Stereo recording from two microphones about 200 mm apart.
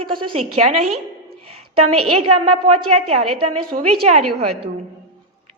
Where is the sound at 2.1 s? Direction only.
30° right (ahead or behind).